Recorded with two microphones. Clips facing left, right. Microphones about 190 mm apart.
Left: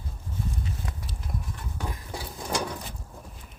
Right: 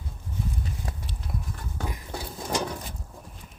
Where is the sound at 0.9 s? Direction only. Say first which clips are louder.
Right 2 dB; 30° right (ahead or behind).